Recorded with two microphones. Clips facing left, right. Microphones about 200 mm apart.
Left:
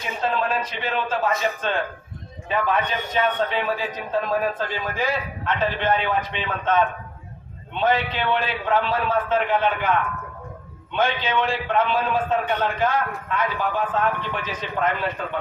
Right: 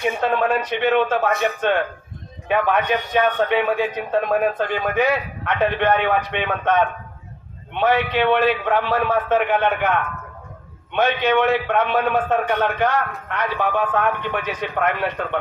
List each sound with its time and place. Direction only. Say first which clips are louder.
0.0 s a man's voice: right 5 dB; 65° right (ahead or behind)